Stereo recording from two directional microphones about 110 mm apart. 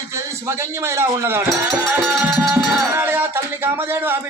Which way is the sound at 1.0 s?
25° right (ahead or behind).